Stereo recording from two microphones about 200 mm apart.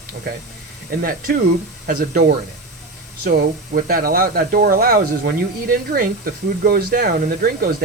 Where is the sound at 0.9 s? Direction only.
45° right (ahead or behind).